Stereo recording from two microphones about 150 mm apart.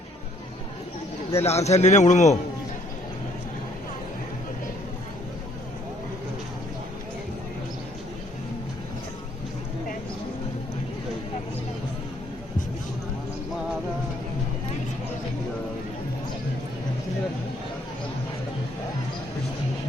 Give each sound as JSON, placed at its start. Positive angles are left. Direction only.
{"t": 1.4, "sound": "a man's voice", "side_deg": 45}